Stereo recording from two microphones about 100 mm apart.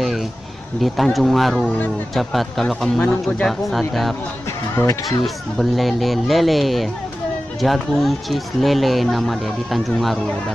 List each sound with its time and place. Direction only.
0.7 s speech: centre (ahead or behind)
4.7 s speech: 30° left (ahead or behind)
5.2 s speech: centre (ahead or behind)